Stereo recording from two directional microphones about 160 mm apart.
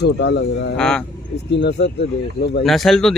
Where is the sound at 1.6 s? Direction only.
90° left.